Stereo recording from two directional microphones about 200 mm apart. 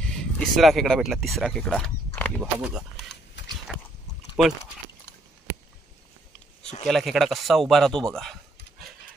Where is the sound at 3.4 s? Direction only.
65° left (ahead or behind).